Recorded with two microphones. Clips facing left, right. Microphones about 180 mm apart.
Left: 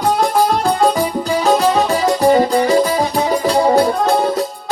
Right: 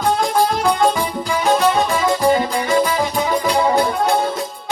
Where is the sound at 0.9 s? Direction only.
35° left (ahead or behind).